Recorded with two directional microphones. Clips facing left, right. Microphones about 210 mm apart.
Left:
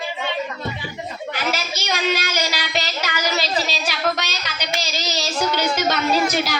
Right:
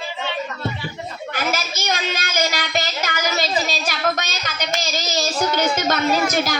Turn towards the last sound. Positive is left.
turn(degrees=-45)  # may be behind; listen again after turning